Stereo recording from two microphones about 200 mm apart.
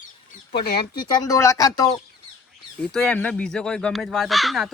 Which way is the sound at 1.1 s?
15° left (ahead or behind).